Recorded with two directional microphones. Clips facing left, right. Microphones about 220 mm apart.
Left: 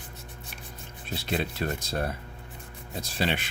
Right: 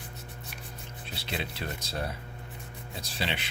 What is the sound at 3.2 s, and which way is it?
Speech, 50° left (ahead or behind).